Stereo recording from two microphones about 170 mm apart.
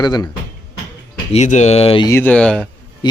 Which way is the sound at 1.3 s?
40° left (ahead or behind).